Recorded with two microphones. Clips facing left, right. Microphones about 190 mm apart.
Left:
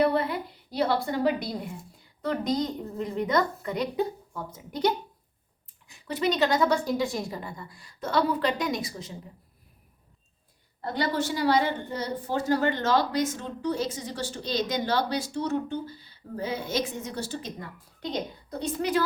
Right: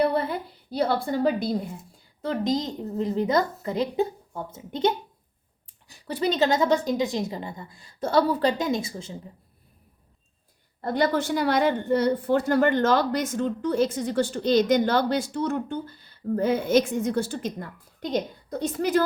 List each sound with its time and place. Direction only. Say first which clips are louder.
0.7 s a woman's voice: right 2 dB; 30° right (ahead or behind)
10.8 s a woman's voice: right 4 dB; 50° right (ahead or behind)